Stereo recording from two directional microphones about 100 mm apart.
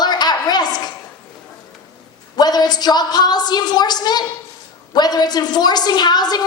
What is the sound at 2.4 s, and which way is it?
A woman's voice, 45° left (ahead or behind).